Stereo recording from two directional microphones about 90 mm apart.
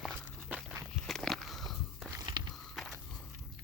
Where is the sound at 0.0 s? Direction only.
Centre (ahead or behind).